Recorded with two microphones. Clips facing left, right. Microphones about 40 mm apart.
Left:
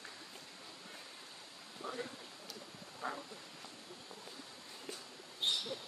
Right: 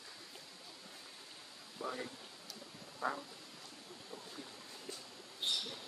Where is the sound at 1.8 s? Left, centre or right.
Right.